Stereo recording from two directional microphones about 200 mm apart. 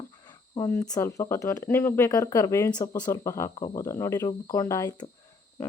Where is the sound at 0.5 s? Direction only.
10° left (ahead or behind).